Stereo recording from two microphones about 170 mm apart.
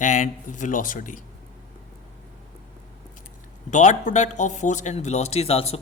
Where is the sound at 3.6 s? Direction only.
45° left (ahead or behind).